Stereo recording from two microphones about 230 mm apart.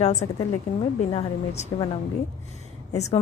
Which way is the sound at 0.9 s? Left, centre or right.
Left.